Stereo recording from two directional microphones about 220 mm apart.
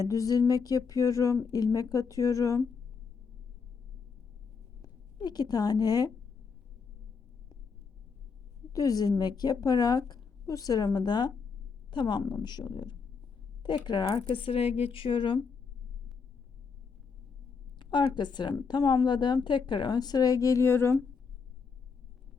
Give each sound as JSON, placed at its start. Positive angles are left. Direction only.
{"t": 0.0, "sound": "humming", "side_deg": 15}
{"t": 4.8, "sound": "speech", "side_deg": 20}
{"t": 8.7, "sound": "humming", "side_deg": 15}
{"t": 11.9, "sound": "a woman's voice", "side_deg": 20}
{"t": 17.7, "sound": "a woman's voice", "side_deg": 20}